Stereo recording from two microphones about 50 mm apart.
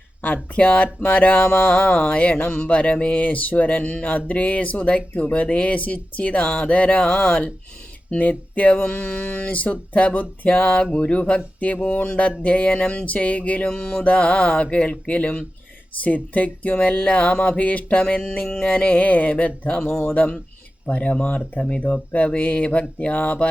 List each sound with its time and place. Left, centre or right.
0.5 s speech: left
8.2 s speech: left
18.2 s a sound: centre
18.7 s speech: left